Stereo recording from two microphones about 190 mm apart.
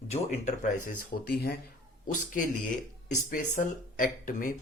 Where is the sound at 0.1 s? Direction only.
40° left (ahead or behind); by 1.5 s 55° left (ahead or behind).